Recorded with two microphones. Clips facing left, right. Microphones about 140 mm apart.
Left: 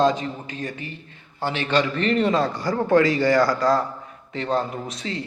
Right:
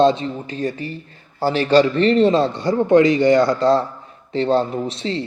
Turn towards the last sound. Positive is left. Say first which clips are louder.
# right 7 dB
turn(degrees=-30)  # may be behind; listen again after turning